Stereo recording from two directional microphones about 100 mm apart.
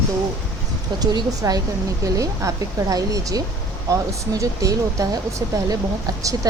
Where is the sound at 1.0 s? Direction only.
40° right (ahead or behind).